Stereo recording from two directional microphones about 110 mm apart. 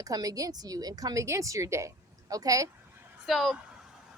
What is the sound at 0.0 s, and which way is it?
Speech, 35° right (ahead or behind).